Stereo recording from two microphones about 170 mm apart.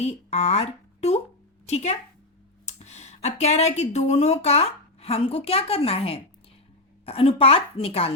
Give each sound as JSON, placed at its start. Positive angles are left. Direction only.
{"t": 0.0, "sound": "a woman's voice", "side_deg": 40}